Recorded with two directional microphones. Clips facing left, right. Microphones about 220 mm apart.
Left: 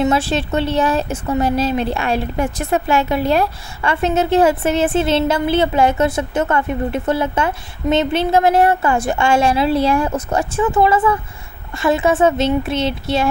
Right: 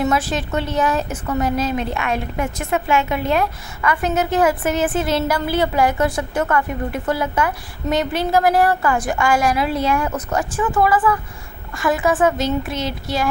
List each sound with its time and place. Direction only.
0.0 s speech: 30° left (ahead or behind)